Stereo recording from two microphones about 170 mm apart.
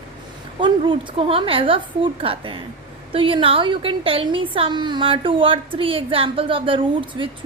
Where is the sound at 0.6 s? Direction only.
30° right (ahead or behind).